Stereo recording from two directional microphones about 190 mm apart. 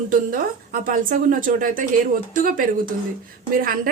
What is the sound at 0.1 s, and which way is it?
Speech, 45° right (ahead or behind).